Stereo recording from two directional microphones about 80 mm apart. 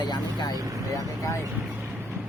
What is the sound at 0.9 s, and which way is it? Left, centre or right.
Speech, left.